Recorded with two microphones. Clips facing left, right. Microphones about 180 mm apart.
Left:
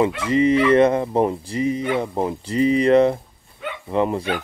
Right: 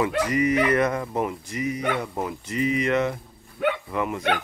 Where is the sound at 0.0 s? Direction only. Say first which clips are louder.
Left 5 dB; 25° left (ahead or behind).